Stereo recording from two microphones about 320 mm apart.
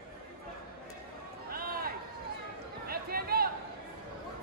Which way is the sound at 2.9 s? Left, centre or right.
Right.